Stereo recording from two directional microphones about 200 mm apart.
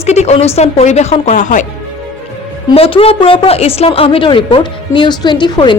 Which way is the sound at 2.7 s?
25° left (ahead or behind).